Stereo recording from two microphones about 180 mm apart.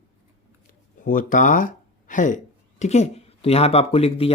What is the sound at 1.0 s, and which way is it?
Speech, 50° left (ahead or behind).